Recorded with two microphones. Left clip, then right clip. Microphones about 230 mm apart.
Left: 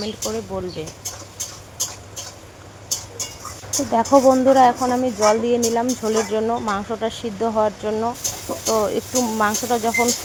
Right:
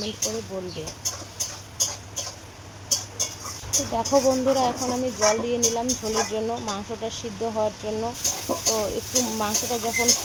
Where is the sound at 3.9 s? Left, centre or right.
Left.